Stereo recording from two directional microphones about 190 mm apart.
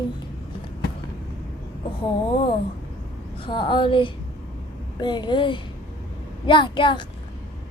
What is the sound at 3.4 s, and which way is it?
A woman's voice, 25° left (ahead or behind).